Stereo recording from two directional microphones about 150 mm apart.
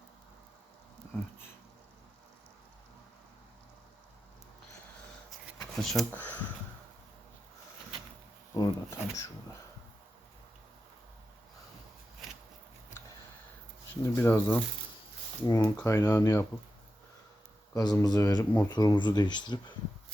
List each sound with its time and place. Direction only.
5.5 s a sound: centre (ahead or behind)
6.1 s speech: 10° left (ahead or behind)
8.5 s speech: 20° left (ahead or behind)
14.0 s speech: 15° left (ahead or behind)
15.4 s speech: 25° left (ahead or behind)
17.7 s speech: 25° left (ahead or behind)